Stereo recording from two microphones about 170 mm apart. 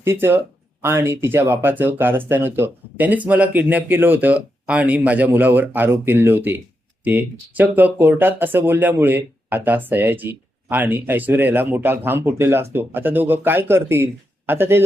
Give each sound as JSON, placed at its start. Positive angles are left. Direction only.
{"t": 0.0, "sound": "speech", "side_deg": -15}